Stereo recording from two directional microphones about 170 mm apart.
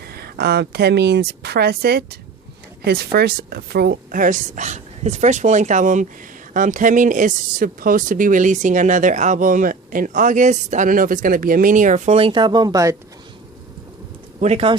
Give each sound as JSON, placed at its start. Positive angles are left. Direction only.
{"t": 0.0, "sound": "speech", "side_deg": -70}
{"t": 14.4, "sound": "speech", "side_deg": -40}